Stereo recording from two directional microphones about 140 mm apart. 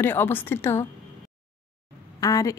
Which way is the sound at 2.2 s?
25° left (ahead or behind).